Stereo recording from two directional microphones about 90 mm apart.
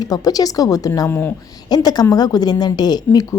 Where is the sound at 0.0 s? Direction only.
45° left (ahead or behind).